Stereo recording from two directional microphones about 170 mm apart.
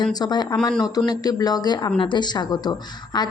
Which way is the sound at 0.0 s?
25° left (ahead or behind).